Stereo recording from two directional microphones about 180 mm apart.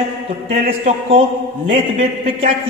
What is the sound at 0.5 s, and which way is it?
A man's voice, 35° right (ahead or behind).